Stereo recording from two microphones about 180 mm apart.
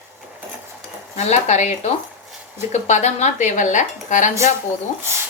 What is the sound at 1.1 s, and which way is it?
A woman's voice, 40° left (ahead or behind).